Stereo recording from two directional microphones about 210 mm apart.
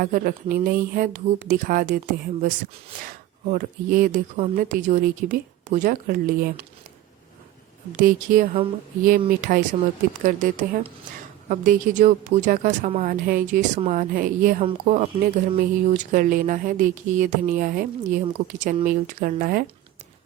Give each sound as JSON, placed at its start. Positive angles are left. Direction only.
{"t": 0.0, "sound": "speech", "side_deg": -40}
{"t": 3.5, "sound": "speech", "side_deg": -40}
{"t": 7.9, "sound": "speech", "side_deg": -40}